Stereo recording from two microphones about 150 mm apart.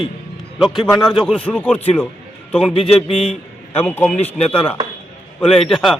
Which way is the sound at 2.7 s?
40° left (ahead or behind).